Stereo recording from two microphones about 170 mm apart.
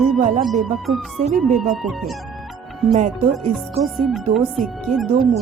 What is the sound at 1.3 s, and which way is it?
Speech, centre (ahead or behind).